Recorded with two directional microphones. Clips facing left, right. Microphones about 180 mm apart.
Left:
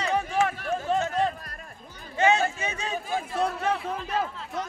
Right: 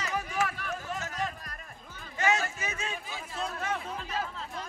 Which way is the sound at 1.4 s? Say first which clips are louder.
Left 3 dB; 45° left (ahead or behind).